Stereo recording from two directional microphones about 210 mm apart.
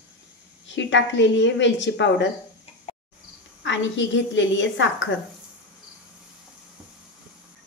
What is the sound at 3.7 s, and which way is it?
A woman's voice, 60° left (ahead or behind).